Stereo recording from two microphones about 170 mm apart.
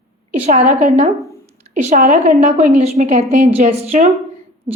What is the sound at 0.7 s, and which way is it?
A woman's voice, 45° right (ahead or behind).